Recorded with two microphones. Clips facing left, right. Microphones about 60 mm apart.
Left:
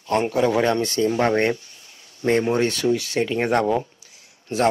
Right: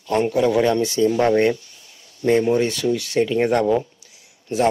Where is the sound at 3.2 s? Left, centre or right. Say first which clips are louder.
Right 4 dB; centre.